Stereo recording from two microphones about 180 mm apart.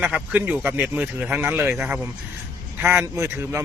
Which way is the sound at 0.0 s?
10° right (ahead or behind).